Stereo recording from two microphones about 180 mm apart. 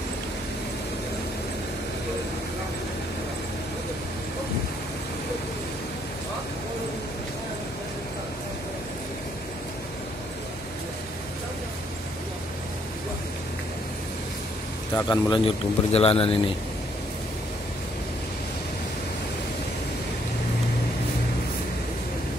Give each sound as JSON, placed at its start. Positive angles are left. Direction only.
{"t": 15.0, "sound": "speech", "side_deg": 25}